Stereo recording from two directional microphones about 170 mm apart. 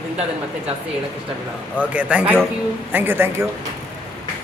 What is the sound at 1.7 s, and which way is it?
A man's voice, 10° right (ahead or behind).